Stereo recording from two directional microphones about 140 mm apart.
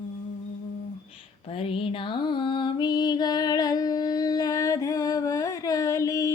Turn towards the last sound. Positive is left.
turn(degrees=25)  # may be behind; listen again after turning